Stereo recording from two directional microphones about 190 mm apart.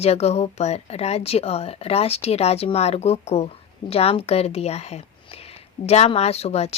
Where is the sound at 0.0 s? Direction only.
35° left (ahead or behind).